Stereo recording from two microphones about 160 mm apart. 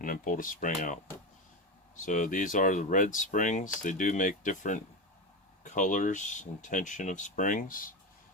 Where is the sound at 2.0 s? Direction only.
55° left (ahead or behind).